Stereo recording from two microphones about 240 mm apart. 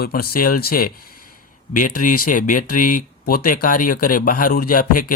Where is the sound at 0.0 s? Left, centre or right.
Left.